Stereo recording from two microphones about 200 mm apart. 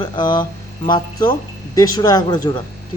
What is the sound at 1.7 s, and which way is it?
Speech, 20° left (ahead or behind).